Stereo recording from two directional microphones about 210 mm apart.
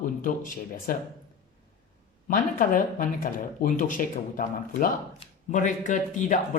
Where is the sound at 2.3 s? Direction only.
40° left (ahead or behind).